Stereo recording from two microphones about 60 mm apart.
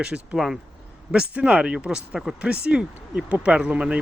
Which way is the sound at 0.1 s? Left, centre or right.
Centre.